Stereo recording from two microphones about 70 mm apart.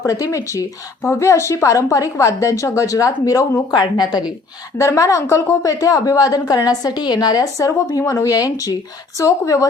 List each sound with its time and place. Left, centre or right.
0.0 s speech: left
3.7 s a woman's voice: left
4.8 s a woman's voice: left